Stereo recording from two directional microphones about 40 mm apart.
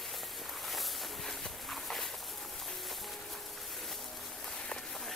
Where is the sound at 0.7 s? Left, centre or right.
Centre.